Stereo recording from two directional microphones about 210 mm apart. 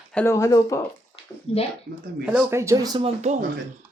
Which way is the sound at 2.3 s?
15° right (ahead or behind).